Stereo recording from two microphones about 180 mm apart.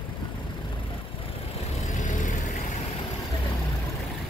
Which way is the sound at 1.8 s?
45° left (ahead or behind).